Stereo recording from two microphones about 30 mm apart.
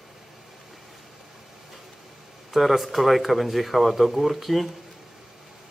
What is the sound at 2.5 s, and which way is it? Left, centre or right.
Speech, centre.